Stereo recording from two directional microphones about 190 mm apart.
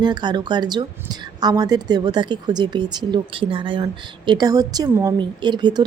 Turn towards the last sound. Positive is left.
turn(degrees=-25)  # may be behind; listen again after turning